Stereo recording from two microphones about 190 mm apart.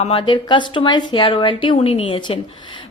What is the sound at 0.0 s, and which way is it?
Speech, 25° left (ahead or behind).